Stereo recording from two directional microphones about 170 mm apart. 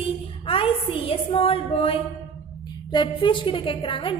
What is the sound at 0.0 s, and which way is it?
A woman's voice, 35° left (ahead or behind).